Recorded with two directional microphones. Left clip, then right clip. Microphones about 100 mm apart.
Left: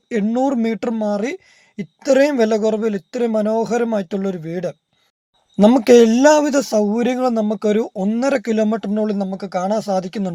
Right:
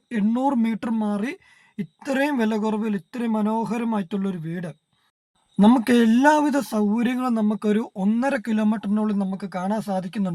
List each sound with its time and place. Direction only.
0.1 s speech: 20° left (ahead or behind)
5.5 s speech: 35° left (ahead or behind)